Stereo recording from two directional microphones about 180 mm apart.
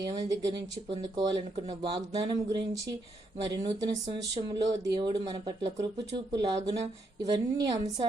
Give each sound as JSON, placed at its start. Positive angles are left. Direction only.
{"t": 0.0, "sound": "speech", "side_deg": -20}